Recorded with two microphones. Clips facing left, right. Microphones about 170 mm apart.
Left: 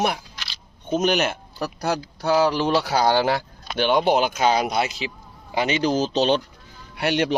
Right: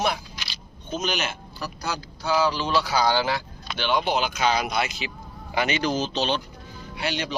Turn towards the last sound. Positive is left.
turn(degrees=60)  # may be behind; listen again after turning